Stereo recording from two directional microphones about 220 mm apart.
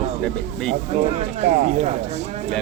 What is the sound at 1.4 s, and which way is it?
Speech, 30° right (ahead or behind).